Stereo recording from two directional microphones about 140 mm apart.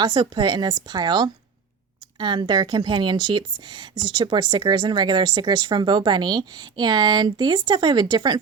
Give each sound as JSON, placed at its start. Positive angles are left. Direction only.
{"t": 0.0, "sound": "speech", "side_deg": -35}